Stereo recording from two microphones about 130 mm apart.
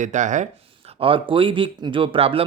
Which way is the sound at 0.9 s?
45° right (ahead or behind).